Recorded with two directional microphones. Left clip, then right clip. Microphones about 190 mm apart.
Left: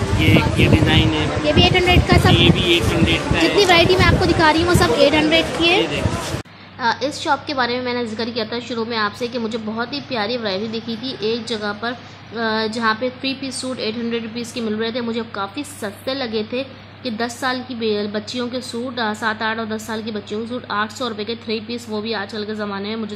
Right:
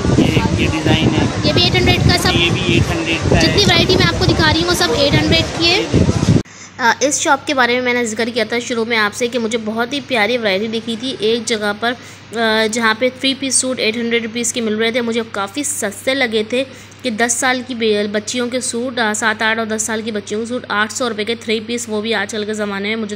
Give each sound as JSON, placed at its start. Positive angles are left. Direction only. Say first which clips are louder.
{"t": 0.2, "sound": "vehicle", "louder": "left 2 dB", "side_deg": -25}
{"t": 1.4, "sound": "a woman's voice", "louder": "even", "side_deg": 0}
{"t": 2.3, "sound": "speech", "louder": "even", "side_deg": -30}
{"t": 3.5, "sound": "a woman's voice", "louder": "left 3 dB", "side_deg": -5}
{"t": 6.8, "sound": "a woman's voice", "louder": "right 6 dB", "side_deg": -25}